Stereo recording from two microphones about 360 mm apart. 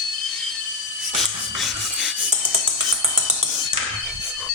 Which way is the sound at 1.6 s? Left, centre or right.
Centre.